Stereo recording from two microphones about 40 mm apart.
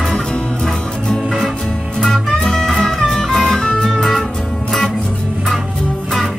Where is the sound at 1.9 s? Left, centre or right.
Centre.